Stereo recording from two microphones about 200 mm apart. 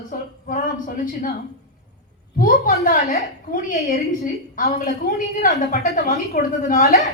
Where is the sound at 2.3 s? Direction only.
45° left (ahead or behind).